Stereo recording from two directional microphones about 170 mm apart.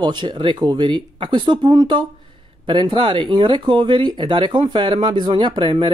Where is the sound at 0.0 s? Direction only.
25° right (ahead or behind).